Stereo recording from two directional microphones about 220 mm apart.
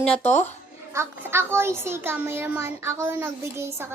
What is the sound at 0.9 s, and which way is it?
A child's voice, 10° right (ahead or behind).